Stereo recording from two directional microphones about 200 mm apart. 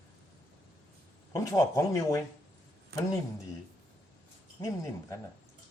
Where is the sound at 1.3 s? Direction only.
15° left (ahead or behind).